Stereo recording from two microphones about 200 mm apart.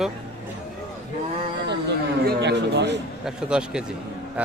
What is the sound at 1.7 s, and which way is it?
Speech, 55° right (ahead or behind).